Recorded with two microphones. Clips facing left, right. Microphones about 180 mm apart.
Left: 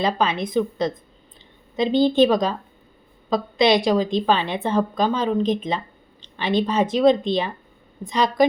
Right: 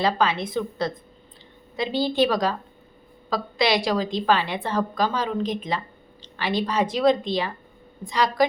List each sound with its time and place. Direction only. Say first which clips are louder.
0.0 s a woman's voice: left 1 dB; 20° left (ahead or behind)